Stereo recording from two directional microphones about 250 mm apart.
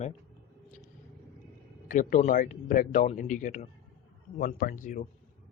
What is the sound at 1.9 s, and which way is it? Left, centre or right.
Speech, left.